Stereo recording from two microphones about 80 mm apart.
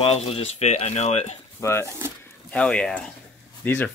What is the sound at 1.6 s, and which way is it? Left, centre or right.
Speech, left.